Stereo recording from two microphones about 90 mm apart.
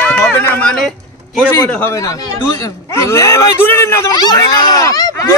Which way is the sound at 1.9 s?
40° left (ahead or behind).